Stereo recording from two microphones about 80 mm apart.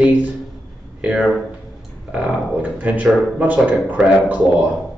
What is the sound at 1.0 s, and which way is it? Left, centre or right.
A man's voice, centre.